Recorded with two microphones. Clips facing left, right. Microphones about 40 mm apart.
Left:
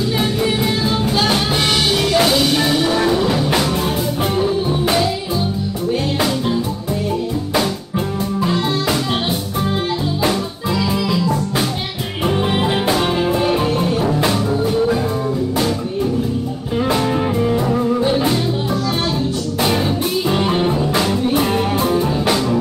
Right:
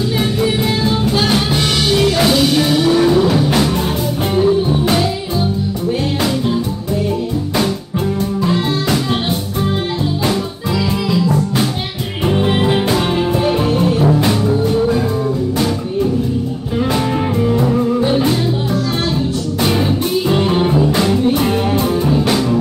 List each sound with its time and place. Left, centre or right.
0.2 s music: centre
8.5 s music: centre
12.3 s music: centre
16.8 s music: centre